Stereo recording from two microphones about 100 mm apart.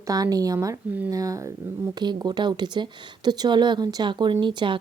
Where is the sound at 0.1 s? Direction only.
40° right (ahead or behind).